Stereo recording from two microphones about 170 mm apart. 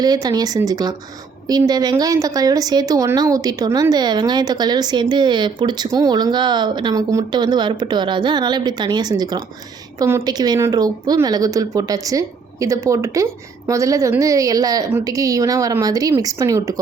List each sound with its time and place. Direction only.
0.0 s a woman's voice: 25° right (ahead or behind)